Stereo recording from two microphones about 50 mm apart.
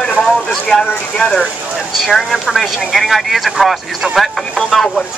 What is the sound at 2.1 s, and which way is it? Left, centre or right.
Speech, centre.